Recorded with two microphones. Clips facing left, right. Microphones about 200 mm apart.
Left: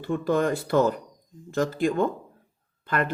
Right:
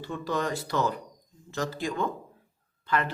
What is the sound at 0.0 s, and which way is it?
Speech, 55° left (ahead or behind).